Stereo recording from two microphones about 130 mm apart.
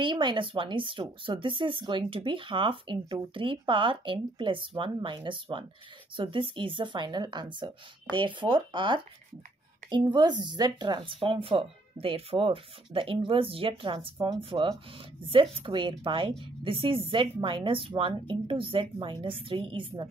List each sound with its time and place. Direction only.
0.0 s a woman's voice: 40° right (ahead or behind)